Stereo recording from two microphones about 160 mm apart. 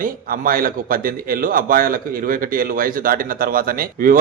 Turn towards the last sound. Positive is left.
turn(degrees=-65)  # may be behind; listen again after turning